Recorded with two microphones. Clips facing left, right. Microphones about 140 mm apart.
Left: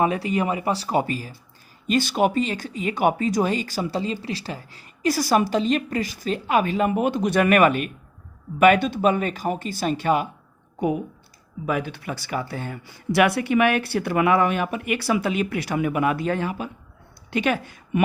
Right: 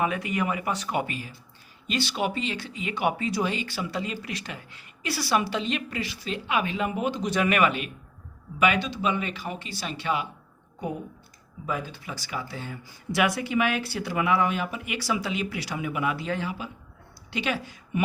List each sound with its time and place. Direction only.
0.0 s speech: 35° left (ahead or behind)
1.9 s speech: 45° left (ahead or behind)
11.6 s a woman's voice: 75° left (ahead or behind); by 18.0 s 55° left (ahead or behind)